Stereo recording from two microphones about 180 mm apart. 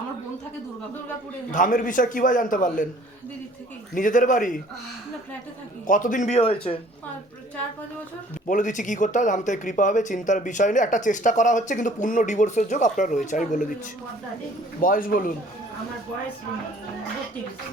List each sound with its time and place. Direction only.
1.5 s speech: 45° left (ahead or behind)
3.9 s speech: 45° left (ahead or behind)
5.9 s speech: 45° left (ahead or behind)
8.4 s speech: 45° left (ahead or behind)
14.8 s speech: 50° left (ahead or behind)